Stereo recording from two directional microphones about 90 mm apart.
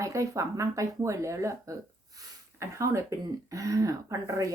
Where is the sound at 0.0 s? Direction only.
35° right (ahead or behind).